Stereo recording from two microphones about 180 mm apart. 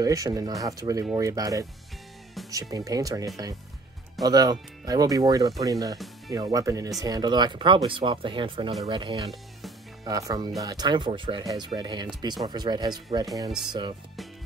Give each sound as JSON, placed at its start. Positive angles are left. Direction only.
{"t": 0.0, "sound": "speech", "side_deg": -20}